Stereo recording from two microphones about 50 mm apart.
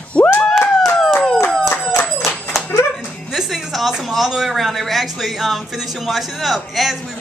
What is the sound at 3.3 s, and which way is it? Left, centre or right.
Speech, centre.